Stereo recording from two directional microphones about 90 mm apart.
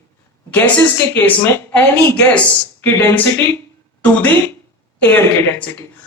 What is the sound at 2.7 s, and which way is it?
Speech, 25° left (ahead or behind).